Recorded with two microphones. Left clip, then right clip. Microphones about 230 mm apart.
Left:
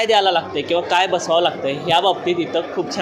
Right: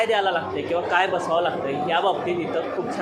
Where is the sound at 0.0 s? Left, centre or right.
Left.